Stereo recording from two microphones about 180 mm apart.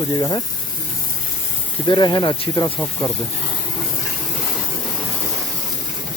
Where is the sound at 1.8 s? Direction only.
25° left (ahead or behind).